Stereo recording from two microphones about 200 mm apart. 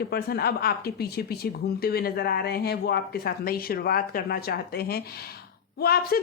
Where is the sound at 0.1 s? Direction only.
50° left (ahead or behind).